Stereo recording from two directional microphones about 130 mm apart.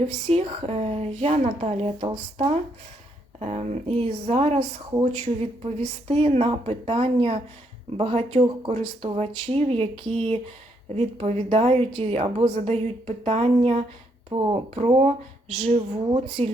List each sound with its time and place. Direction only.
0.3 s a woman's voice: 50° right (ahead or behind)
3.4 s a woman's voice: 55° right (ahead or behind)
10.9 s a woman's voice: 55° right (ahead or behind)
14.3 s speech: 35° right (ahead or behind)
14.8 s a woman's voice: 55° right (ahead or behind)